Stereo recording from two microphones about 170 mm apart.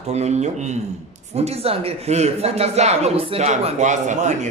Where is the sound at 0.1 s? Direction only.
40° right (ahead or behind).